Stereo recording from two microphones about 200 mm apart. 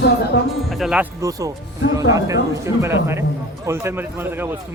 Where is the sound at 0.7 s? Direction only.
Centre (ahead or behind).